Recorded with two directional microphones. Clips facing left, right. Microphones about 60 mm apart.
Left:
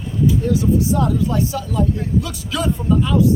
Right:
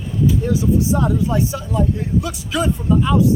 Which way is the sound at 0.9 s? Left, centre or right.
Centre.